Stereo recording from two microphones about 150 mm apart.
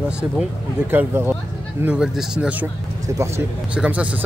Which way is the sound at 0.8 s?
15° right (ahead or behind).